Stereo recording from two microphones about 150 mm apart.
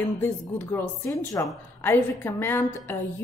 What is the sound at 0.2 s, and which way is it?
A woman's voice, 20° left (ahead or behind).